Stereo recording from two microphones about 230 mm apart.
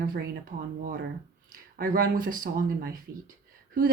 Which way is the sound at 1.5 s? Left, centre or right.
Right.